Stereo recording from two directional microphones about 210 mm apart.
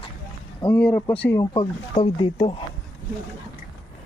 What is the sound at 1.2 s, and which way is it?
Speech, 15° left (ahead or behind).